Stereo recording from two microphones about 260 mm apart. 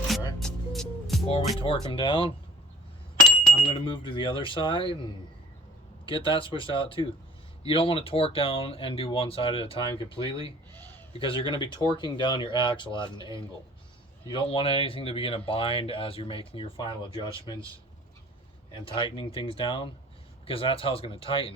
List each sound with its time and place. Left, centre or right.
0.3 s music: centre
1.3 s speech: left
3.7 s speech: centre
6.1 s speech: centre
18.9 s speech: centre